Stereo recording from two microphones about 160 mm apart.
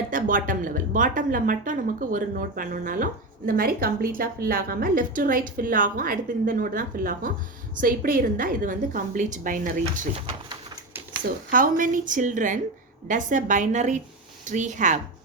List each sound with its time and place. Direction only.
0.1 s a woman's voice: 60° right (ahead or behind)
11.5 s a woman's voice: 60° right (ahead or behind)